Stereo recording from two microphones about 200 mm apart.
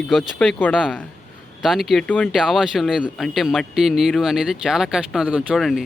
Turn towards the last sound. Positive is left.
turn(degrees=0)  # may be behind; listen again after turning